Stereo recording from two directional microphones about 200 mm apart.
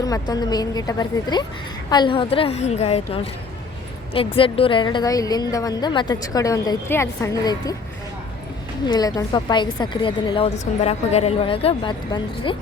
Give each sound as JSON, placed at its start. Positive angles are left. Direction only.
{"t": 0.0, "sound": "a woman's voice", "side_deg": 20}
{"t": 8.9, "sound": "a woman's voice", "side_deg": 20}